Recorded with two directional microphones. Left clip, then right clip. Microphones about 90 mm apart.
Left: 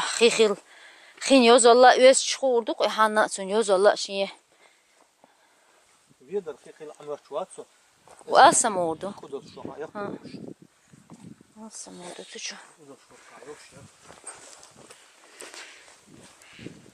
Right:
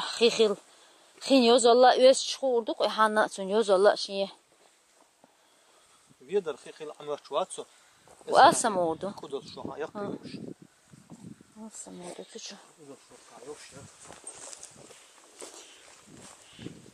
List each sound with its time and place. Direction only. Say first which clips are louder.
0.0 s a woman's voice: left 4 dB; 10° left (ahead or behind)
6.2 s speech: right 2 dB; 10° right (ahead or behind)
8.3 s speech: left 3 dB; 10° left (ahead or behind)
11.6 s speech: left 2 dB; 5° left (ahead or behind)
14.4 s walk: right 2 dB; 40° right (ahead or behind)